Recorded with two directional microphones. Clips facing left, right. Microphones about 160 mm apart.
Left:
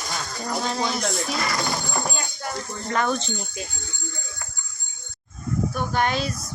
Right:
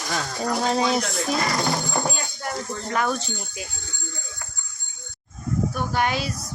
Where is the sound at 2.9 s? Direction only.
5° right (ahead or behind).